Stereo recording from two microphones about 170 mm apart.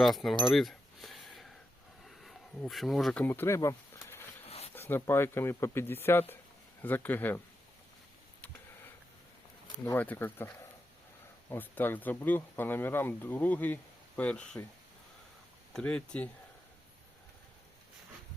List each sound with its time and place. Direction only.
0.0 s speech: centre (ahead or behind)
0.4 s keys jangling: centre (ahead or behind)
2.0 s speech: centre (ahead or behind); by 4.2 s 15° left (ahead or behind)
4.4 s a sound: 35° left (ahead or behind)
4.7 s speech: 15° left (ahead or behind)
9.8 s speech: 10° left (ahead or behind)
15.7 s speech: 5° left (ahead or behind)